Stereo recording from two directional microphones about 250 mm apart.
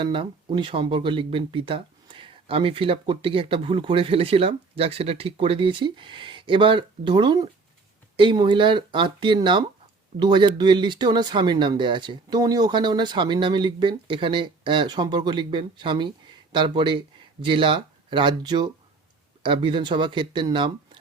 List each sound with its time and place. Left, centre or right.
0.0 s speech: centre